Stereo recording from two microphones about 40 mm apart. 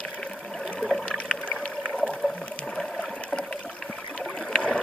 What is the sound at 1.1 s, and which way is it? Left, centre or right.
Water, left.